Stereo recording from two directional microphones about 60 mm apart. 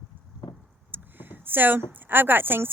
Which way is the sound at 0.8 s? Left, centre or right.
Right.